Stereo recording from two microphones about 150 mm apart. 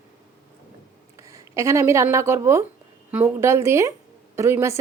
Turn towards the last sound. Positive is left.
turn(degrees=-20)  # may be behind; listen again after turning